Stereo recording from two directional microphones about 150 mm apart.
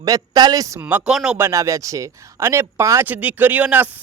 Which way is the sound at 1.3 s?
20° right (ahead or behind).